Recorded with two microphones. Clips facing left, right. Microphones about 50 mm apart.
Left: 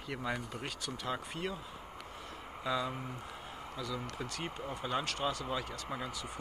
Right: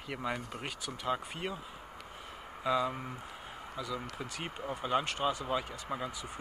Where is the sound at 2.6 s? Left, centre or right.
Centre.